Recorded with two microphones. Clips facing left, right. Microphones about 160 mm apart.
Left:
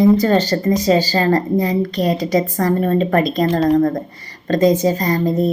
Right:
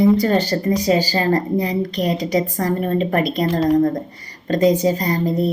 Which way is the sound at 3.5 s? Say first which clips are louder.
Left 1 dB; 20° left (ahead or behind).